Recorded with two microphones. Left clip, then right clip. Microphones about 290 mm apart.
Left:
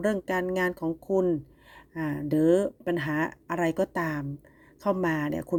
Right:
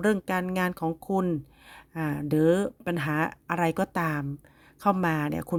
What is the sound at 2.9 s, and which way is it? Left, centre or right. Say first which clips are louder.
Speech: right 3 dB; right.